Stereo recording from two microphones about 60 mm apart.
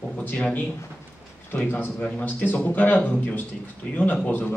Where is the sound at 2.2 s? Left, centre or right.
Left.